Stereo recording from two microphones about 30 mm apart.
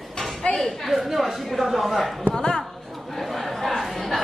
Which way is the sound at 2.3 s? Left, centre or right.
Left.